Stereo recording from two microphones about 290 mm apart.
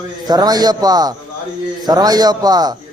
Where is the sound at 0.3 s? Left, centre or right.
Centre.